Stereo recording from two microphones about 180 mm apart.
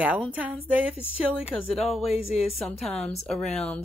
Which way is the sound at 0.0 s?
10° right (ahead or behind).